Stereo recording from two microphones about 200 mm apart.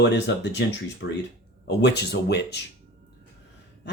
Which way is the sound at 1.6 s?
60° left (ahead or behind).